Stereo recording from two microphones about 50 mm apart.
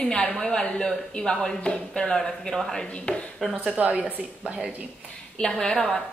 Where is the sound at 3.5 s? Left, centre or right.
Right.